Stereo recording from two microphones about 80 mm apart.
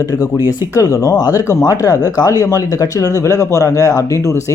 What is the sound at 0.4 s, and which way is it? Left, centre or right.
A man's voice, left.